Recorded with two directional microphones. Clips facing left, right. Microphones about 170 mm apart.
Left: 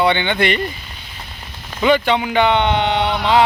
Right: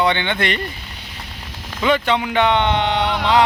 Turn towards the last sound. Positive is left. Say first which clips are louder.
# left 1 dB
turn(degrees=0)  # may be behind; listen again after turning